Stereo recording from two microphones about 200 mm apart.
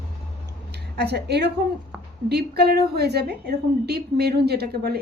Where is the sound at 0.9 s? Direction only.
55° right (ahead or behind).